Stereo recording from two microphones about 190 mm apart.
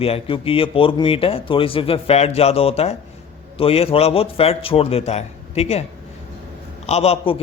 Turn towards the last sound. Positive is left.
turn(degrees=30)  # may be behind; listen again after turning